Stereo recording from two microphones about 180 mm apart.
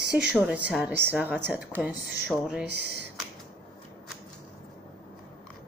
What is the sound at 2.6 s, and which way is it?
Speech, 65° right (ahead or behind).